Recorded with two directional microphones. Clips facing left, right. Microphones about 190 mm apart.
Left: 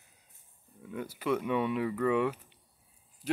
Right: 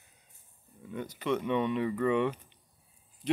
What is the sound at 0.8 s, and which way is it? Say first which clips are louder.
Speech: even; 5° left (ahead or behind).